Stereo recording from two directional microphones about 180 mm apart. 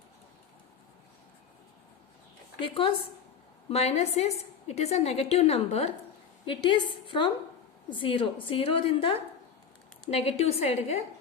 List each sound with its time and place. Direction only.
2.6 s a woman's voice: 30° left (ahead or behind)